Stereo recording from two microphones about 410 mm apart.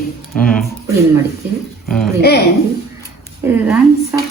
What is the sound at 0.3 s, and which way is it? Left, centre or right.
Speech, centre.